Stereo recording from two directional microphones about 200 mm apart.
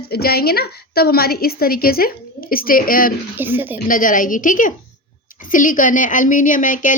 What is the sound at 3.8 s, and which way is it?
A woman's voice, 45° left (ahead or behind).